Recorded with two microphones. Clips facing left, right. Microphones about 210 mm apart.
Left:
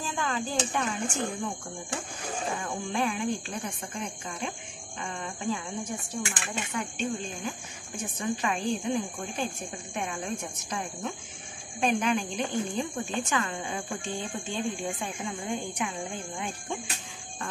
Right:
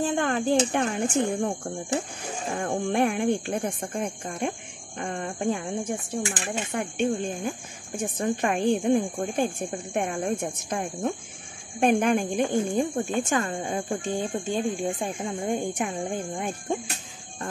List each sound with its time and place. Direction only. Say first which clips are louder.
0.0 s speech: right 8 dB; 60° right (ahead or behind)